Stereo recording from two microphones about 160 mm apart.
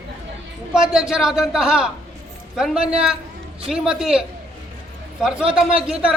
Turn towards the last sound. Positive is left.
turn(degrees=-5)  # may be behind; listen again after turning